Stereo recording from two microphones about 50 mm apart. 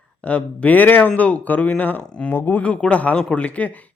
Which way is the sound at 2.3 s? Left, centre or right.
Left.